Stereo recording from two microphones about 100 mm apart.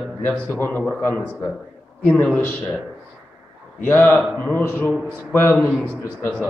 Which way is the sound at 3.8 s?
20° left (ahead or behind).